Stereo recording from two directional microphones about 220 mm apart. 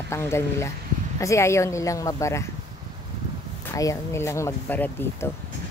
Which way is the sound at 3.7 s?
15° left (ahead or behind).